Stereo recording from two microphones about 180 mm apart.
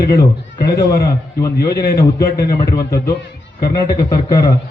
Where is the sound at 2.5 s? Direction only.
20° left (ahead or behind).